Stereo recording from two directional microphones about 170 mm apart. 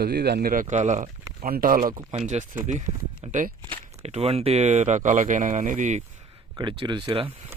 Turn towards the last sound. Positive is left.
turn(degrees=-30)  # may be behind; listen again after turning